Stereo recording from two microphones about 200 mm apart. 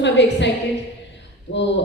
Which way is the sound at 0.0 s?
60° left (ahead or behind).